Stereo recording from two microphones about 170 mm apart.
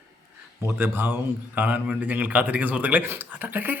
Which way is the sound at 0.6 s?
15° right (ahead or behind).